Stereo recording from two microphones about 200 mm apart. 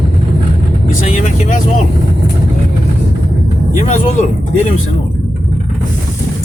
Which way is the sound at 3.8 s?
35° left (ahead or behind).